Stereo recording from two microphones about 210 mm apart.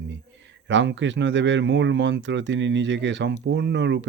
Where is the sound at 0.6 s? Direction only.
60° right (ahead or behind).